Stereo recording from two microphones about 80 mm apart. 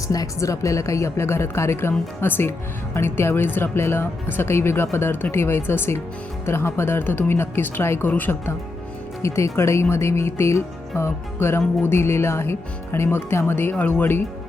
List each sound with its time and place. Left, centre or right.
0.1 s speech: left
9.2 s speech: left